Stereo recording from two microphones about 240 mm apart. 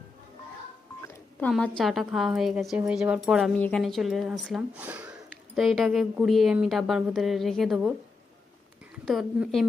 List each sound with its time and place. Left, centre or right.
1.0 s telephone dialing: centre
1.8 s a woman's voice: centre
9.0 s a woman's voice: centre